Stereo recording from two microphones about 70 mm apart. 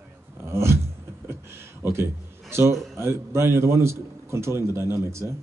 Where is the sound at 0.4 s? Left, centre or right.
Right.